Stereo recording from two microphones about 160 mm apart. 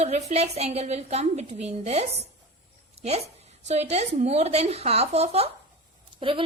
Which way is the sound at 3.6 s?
45° right (ahead or behind).